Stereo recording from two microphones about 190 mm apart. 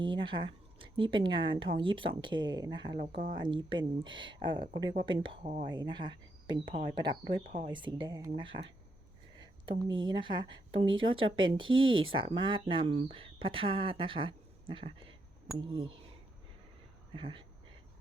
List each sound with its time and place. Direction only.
0.0 s speech: 25° right (ahead or behind)
3.0 s speech: 45° right (ahead or behind)
3.3 s speech: 25° right (ahead or behind)
9.4 s a sound: 20° right (ahead or behind)
10.0 s speech: 25° right (ahead or behind)
11.7 s speech: 90° right
12.1 s speech: 25° right (ahead or behind)
17.2 s speech: 30° right (ahead or behind)